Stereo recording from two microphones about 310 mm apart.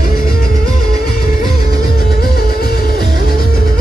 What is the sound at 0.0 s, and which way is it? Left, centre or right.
Music, left.